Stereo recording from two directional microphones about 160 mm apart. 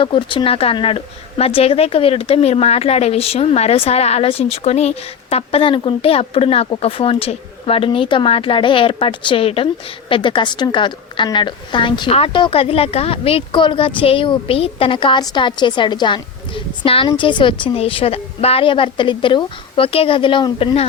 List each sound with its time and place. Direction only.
0.0 s a woman's voice: 30° left (ahead or behind)